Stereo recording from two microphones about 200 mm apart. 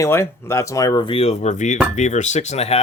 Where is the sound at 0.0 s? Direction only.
15° left (ahead or behind).